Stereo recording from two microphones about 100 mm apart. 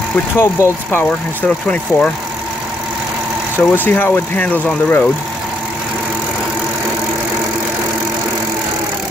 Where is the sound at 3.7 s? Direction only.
20° left (ahead or behind).